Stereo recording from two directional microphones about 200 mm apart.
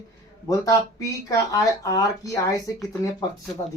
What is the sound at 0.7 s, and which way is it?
Speech, 15° left (ahead or behind).